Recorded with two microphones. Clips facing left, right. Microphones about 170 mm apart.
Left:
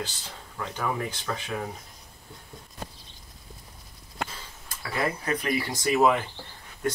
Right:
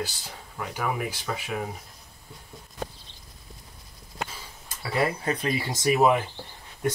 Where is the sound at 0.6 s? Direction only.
10° right (ahead or behind).